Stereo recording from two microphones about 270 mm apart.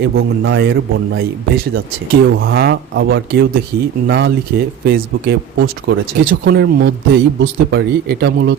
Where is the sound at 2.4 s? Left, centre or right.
Right.